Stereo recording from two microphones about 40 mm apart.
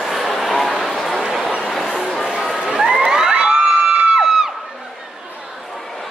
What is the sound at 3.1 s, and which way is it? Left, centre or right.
Crowd, centre.